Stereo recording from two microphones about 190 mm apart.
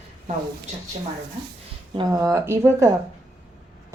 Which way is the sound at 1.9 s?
15° right (ahead or behind).